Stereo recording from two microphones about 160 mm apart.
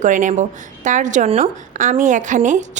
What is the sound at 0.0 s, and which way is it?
A woman's voice, 55° right (ahead or behind).